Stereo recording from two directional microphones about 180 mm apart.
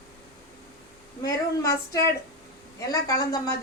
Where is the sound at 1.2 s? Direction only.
20° left (ahead or behind).